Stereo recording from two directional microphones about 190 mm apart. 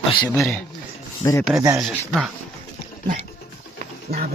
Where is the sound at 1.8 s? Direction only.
Centre (ahead or behind).